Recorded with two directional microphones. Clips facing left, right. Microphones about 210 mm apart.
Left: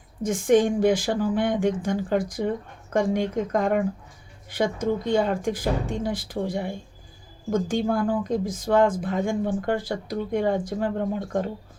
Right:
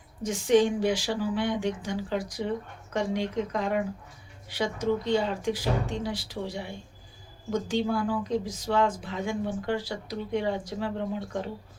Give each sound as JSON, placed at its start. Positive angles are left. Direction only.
{"t": 0.2, "sound": "speech", "side_deg": 50}